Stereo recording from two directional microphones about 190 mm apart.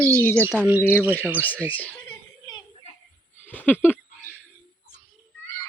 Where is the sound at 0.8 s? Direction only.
10° left (ahead or behind).